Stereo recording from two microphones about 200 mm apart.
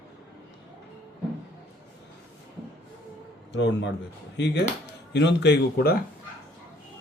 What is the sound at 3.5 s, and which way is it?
A man's voice, 65° left (ahead or behind).